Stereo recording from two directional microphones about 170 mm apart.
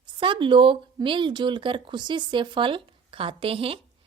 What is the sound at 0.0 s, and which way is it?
Speech, 30° right (ahead or behind).